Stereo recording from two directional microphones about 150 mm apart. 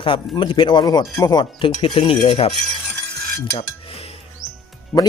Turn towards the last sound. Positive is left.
turn(degrees=10)  # may be behind; listen again after turning